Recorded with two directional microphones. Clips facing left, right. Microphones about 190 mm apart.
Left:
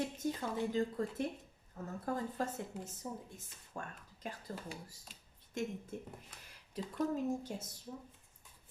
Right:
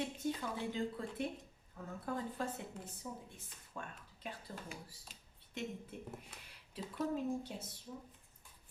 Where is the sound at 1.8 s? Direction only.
45° left (ahead or behind).